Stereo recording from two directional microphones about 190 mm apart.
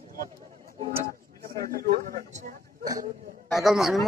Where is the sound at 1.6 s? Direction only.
50° right (ahead or behind).